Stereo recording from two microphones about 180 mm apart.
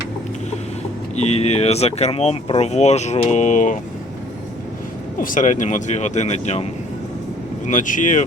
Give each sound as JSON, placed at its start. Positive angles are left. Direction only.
{"t": 1.1, "sound": "speech", "side_deg": 35}
{"t": 5.2, "sound": "speech", "side_deg": 45}
{"t": 7.7, "sound": "speech", "side_deg": 45}